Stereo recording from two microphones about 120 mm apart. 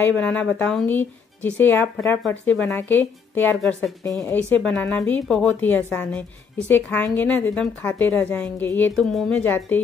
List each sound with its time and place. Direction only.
0.0 s a woman's voice: 15° left (ahead or behind)
8.9 s speech: 5° left (ahead or behind)
9.4 s a woman's voice: 15° left (ahead or behind)